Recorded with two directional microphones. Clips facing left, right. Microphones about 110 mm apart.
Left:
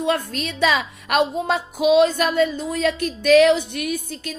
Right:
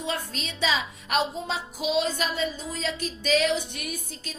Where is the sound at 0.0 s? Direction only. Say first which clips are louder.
Left 9 dB; 55° left (ahead or behind).